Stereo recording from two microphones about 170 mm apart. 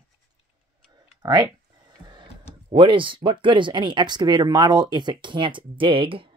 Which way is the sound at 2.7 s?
30° right (ahead or behind).